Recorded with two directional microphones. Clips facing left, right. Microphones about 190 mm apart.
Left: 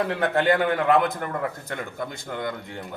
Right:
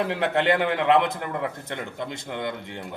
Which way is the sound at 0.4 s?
20° right (ahead or behind).